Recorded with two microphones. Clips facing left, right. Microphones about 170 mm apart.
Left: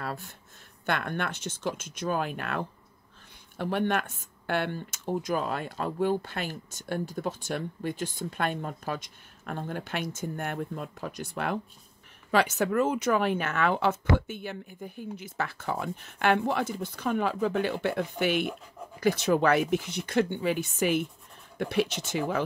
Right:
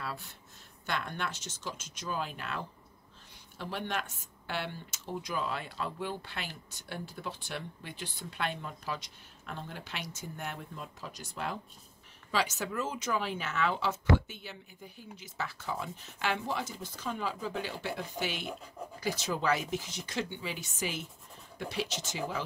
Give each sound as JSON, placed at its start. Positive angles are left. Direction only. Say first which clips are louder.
{"t": 0.8, "sound": "speech", "louder": "left 6 dB", "side_deg": 60}